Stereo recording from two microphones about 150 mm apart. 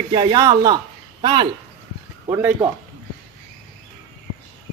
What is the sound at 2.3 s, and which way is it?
Speech, 20° right (ahead or behind).